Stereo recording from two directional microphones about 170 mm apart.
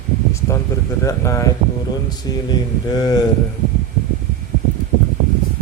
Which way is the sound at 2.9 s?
25° left (ahead or behind).